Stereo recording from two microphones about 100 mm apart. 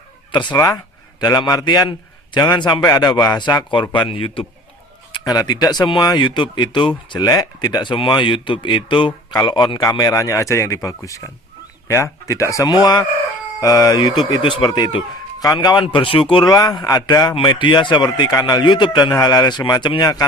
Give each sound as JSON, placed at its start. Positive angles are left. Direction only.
{"t": 0.3, "sound": "speech", "side_deg": 50}
{"t": 0.5, "sound": "a man's voice", "side_deg": 35}
{"t": 5.2, "sound": "a man's voice", "side_deg": 40}
{"t": 7.3, "sound": "a man's voice", "side_deg": 40}
{"t": 9.4, "sound": "a man's voice", "side_deg": 40}
{"t": 16.5, "sound": "a man's voice", "side_deg": 35}